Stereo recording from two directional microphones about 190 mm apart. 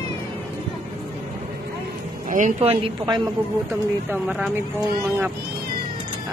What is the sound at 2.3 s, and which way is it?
Speech, 40° right (ahead or behind).